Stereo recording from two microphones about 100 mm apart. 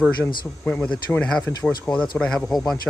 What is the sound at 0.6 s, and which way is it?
Speech, 10° left (ahead or behind).